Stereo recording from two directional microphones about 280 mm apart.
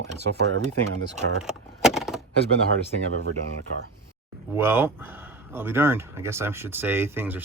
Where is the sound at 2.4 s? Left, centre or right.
Left.